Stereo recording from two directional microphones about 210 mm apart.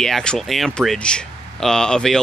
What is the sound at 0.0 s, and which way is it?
Speech, 5° left (ahead or behind).